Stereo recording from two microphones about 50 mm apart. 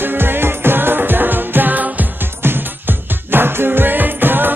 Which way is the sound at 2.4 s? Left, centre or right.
Right.